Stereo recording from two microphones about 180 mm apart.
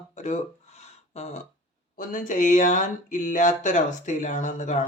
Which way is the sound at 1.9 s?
50° left (ahead or behind).